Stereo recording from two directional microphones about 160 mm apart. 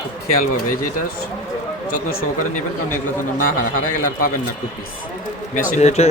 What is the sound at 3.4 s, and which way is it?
Speech, 60° left (ahead or behind).